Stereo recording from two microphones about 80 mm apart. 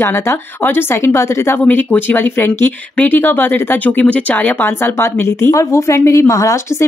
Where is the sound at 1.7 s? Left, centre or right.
Left.